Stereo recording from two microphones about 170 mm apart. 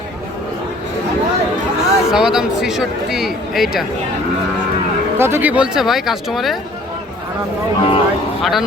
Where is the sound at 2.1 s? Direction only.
5° right (ahead or behind).